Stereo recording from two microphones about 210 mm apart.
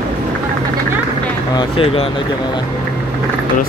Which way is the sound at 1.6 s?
25° left (ahead or behind).